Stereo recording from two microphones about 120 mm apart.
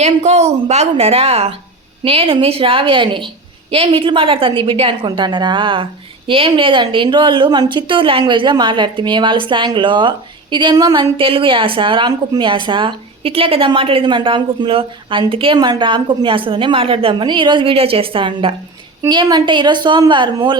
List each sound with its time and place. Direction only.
0.0 s a woman's voice: 65° right (ahead or behind); by 15.5 s 50° right (ahead or behind)
15.5 s a woman's voice: 35° right (ahead or behind)